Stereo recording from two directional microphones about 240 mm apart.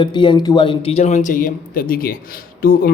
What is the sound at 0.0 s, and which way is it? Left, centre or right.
Speech, centre.